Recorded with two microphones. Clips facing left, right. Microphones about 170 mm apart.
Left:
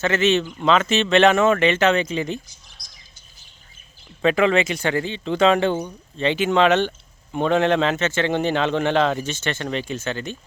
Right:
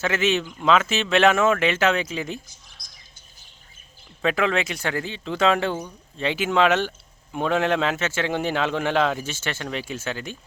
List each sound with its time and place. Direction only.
0.0 s speech: 10° right (ahead or behind)
2.8 s bird: 55° right (ahead or behind)
4.2 s a man's voice: centre (ahead or behind)